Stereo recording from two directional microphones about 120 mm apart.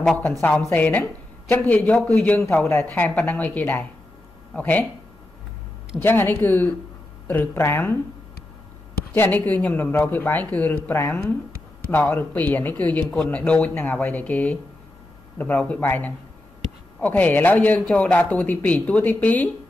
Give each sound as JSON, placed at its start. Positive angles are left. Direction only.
{"t": 0.4, "sound": "speech", "side_deg": 15}
{"t": 6.0, "sound": "speech", "side_deg": 15}
{"t": 9.1, "sound": "speech", "side_deg": 15}